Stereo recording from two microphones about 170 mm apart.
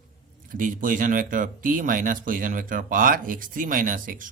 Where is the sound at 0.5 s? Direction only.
50° right (ahead or behind).